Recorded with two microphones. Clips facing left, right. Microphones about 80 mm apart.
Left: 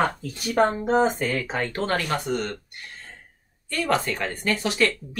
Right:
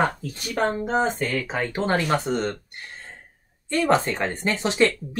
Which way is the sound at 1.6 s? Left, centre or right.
Centre.